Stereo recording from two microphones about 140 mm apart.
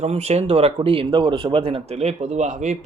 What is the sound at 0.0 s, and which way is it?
Speech, 50° right (ahead or behind).